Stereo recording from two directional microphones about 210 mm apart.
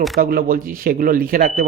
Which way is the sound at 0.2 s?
45° right (ahead or behind).